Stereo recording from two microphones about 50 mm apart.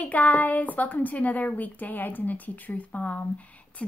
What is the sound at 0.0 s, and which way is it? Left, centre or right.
A woman's voice, left.